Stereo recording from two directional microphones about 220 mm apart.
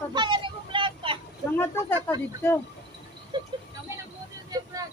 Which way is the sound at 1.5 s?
10° left (ahead or behind).